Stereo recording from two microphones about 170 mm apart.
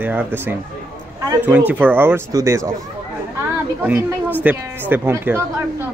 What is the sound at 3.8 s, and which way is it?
A man's voice, 10° right (ahead or behind).